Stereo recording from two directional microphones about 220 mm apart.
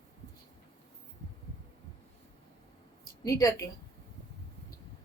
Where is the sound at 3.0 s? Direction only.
15° left (ahead or behind).